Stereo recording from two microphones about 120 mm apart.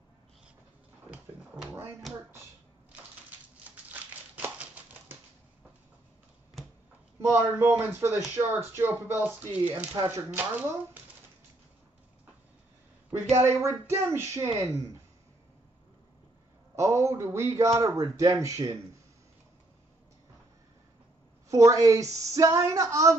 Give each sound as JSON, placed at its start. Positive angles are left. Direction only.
{"t": 1.1, "sound": "a sound", "side_deg": -10}
{"t": 3.7, "sound": "a sound", "side_deg": -15}
{"t": 7.2, "sound": "a woman's voice", "side_deg": -20}
{"t": 13.4, "sound": "a woman's voice", "side_deg": -20}
{"t": 16.7, "sound": "a woman's voice", "side_deg": -25}
{"t": 21.5, "sound": "a woman's voice", "side_deg": -25}